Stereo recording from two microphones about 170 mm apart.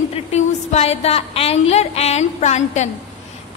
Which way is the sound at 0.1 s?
40° left (ahead or behind).